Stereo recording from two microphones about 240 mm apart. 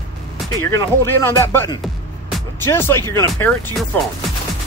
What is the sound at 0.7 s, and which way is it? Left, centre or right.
Speech, centre.